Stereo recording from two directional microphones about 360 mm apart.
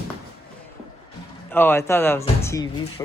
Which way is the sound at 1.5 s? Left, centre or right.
Centre.